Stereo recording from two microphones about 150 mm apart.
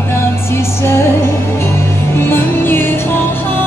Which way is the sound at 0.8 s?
15° left (ahead or behind).